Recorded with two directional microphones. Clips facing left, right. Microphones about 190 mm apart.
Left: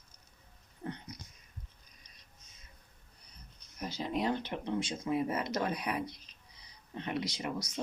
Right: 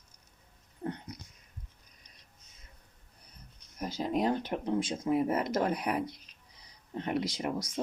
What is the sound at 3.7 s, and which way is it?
Speech, 45° right (ahead or behind).